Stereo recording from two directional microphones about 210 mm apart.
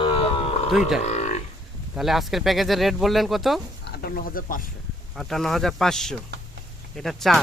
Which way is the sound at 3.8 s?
50° left (ahead or behind).